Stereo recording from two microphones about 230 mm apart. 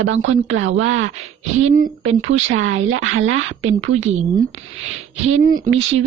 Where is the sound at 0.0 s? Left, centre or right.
Right.